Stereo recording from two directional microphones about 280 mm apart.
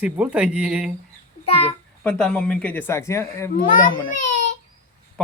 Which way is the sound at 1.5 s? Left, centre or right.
Left.